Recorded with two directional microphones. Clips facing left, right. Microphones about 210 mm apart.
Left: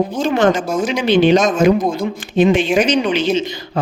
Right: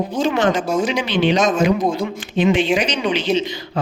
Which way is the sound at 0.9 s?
45° left (ahead or behind).